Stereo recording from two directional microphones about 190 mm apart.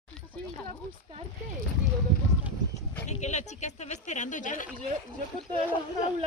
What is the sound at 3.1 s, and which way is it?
Speech, 35° left (ahead or behind).